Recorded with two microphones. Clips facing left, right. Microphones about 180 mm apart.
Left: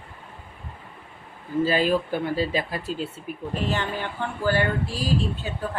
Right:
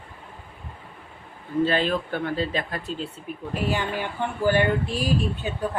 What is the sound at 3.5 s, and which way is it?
Speech, 10° right (ahead or behind).